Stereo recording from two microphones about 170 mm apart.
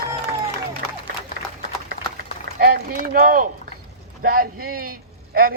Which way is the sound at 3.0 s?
55° right (ahead or behind).